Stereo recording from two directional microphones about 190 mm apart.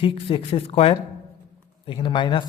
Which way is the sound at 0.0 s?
25° left (ahead or behind).